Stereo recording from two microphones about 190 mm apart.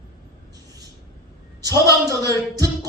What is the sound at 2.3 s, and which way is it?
Music, 20° right (ahead or behind).